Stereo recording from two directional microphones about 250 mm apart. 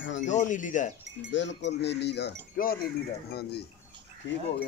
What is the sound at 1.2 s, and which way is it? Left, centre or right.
Speech, left.